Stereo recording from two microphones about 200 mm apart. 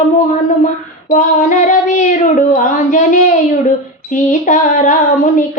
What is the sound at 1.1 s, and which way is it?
Speech, 40° left (ahead or behind).